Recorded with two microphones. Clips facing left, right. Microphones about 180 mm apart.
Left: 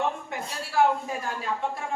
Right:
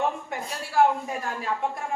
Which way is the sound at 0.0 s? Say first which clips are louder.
Right 1 dB; centre (ahead or behind).